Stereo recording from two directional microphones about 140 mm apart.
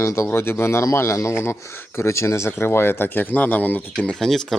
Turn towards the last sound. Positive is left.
turn(degrees=5)  # may be behind; listen again after turning